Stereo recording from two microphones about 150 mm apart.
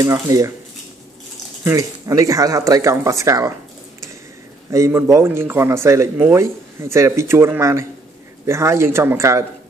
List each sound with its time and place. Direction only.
0.0 s speech: 25° right (ahead or behind)
1.6 s speech: 20° right (ahead or behind)
4.6 s speech: 20° right (ahead or behind)